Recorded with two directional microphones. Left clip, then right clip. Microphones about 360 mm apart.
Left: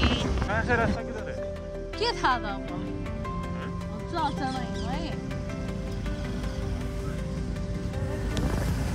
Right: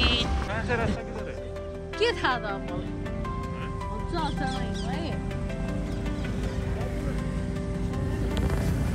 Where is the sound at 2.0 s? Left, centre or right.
Centre.